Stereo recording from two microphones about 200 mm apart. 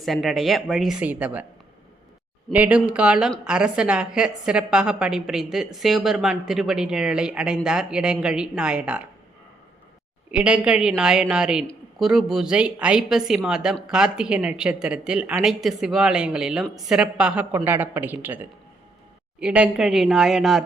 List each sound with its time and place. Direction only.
0.0 s a woman's voice: centre (ahead or behind)
2.5 s a woman's voice: 5° right (ahead or behind)
10.3 s a woman's voice: 5° right (ahead or behind)